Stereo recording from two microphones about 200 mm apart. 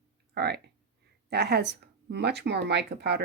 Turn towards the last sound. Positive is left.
turn(degrees=-55)  # may be behind; listen again after turning